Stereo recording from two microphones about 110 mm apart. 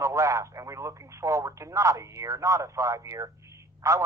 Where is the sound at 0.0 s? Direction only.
30° right (ahead or behind).